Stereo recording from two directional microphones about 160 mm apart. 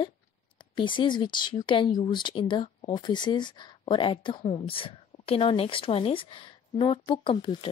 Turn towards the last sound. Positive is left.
turn(degrees=30)  # may be behind; listen again after turning